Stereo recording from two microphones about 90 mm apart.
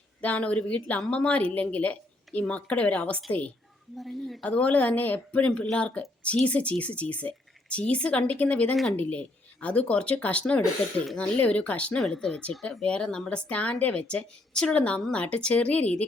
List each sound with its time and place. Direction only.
0.2 s speech: 15° left (ahead or behind)
3.9 s a woman's voice: centre (ahead or behind)
4.4 s speech: 15° left (ahead or behind)
8.7 s a woman's voice: centre (ahead or behind)
9.0 s speech: 15° left (ahead or behind)